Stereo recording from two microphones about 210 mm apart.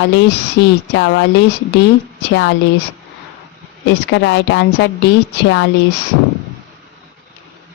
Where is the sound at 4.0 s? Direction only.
55° left (ahead or behind).